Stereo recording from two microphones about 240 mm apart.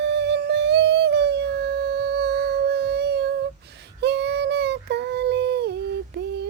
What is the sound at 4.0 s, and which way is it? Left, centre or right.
Child singing, right.